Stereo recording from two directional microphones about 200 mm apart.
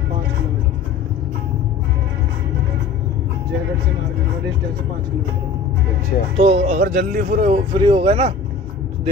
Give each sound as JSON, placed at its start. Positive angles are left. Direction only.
{"t": 6.3, "sound": "speech", "side_deg": -30}
{"t": 6.8, "sound": "a man's voice", "side_deg": -45}
{"t": 7.5, "sound": "speech", "side_deg": -25}